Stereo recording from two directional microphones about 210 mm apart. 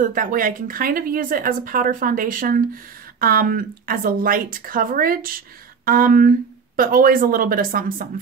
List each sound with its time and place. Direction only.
0.0 s speech: 40° right (ahead or behind)